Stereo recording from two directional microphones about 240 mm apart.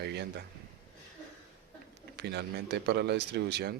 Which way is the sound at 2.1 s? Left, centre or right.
Right.